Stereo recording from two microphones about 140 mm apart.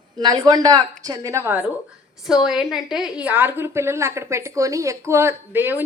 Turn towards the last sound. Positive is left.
turn(degrees=-15)  # may be behind; listen again after turning